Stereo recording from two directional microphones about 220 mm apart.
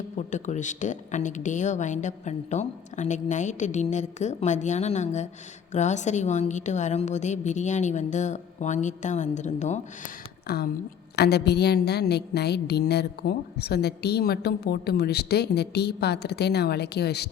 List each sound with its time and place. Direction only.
0.2 s a woman's voice: 35° left (ahead or behind)
10.4 s a woman's voice: 45° left (ahead or behind)